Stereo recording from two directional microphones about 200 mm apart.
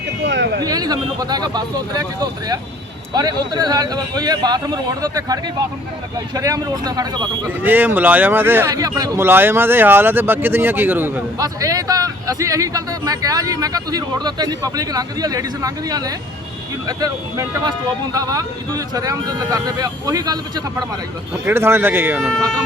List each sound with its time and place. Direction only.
0.2 s a sound: 60° right (ahead or behind)
0.6 s speech: 20° right (ahead or behind)
7.6 s speech: 10° right (ahead or behind)